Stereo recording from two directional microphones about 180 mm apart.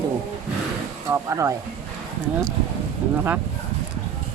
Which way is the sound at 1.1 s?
15° right (ahead or behind).